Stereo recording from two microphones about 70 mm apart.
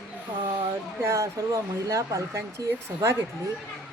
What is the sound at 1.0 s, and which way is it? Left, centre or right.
A child's voice, right.